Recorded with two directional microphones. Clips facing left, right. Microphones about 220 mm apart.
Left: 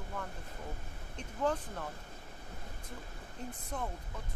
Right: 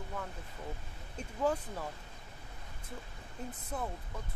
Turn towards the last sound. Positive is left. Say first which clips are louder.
# right 1 dB
turn(degrees=-5)  # may be behind; listen again after turning